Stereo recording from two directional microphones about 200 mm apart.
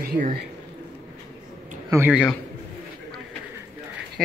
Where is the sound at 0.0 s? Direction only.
45° right (ahead or behind).